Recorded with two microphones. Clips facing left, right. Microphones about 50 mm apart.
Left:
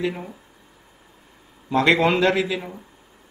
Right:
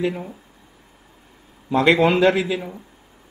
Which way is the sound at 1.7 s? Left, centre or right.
Centre.